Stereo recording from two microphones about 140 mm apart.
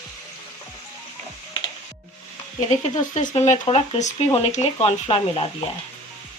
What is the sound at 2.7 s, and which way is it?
Speech, 55° left (ahead or behind).